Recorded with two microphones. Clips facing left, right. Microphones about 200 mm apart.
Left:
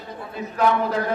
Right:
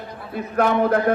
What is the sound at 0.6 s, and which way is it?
Speech, 55° right (ahead or behind).